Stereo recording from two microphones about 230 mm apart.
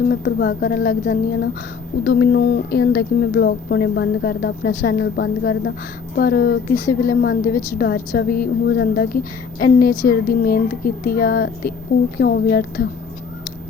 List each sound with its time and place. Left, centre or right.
0.1 s a woman's voice: left
7.5 s a woman's voice: centre
7.8 s a woman's voice: left